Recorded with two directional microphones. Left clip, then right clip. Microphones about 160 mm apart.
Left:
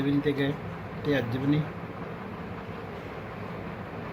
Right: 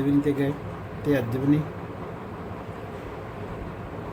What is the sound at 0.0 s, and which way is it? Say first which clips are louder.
Speech: right 3 dB; 15° right (ahead or behind).